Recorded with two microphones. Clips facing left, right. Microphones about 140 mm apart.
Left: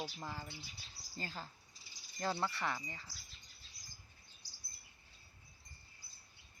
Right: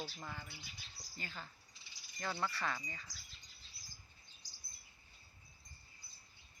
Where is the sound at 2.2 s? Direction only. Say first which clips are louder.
Left 2 dB; 25° left (ahead or behind).